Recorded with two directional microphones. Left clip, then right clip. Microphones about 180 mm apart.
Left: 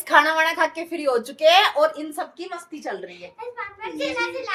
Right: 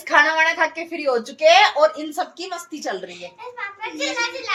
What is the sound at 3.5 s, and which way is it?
Speech, 20° left (ahead or behind).